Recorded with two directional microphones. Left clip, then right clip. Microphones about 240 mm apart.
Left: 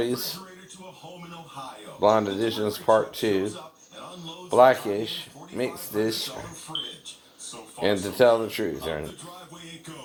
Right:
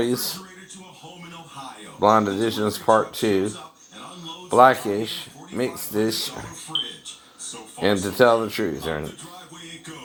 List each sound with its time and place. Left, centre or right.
0.0 s a man's voice: right
2.0 s speech: right
7.8 s speech: right